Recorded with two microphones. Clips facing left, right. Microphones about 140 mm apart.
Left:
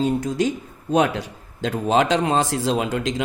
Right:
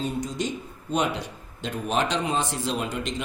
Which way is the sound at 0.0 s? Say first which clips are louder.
Left 8 dB; 90° left.